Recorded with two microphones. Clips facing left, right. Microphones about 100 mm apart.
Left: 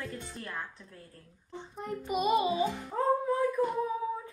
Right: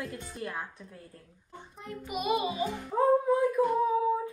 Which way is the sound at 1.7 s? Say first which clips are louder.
Left 4 dB; 40° left (ahead or behind).